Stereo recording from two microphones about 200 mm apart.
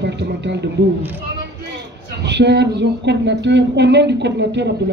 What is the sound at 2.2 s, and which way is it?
Speech, 60° right (ahead or behind).